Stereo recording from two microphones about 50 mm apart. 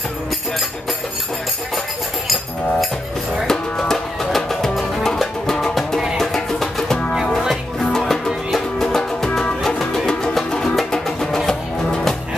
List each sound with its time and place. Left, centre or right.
3.4 s music: centre
8.5 s music: centre